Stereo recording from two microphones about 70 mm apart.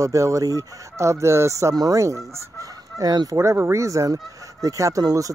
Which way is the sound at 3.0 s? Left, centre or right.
Right.